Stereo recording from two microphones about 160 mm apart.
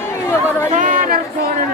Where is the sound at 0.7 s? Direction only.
55° right (ahead or behind).